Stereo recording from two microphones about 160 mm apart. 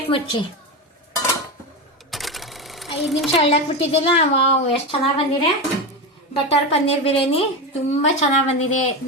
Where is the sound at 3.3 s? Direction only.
40° left (ahead or behind).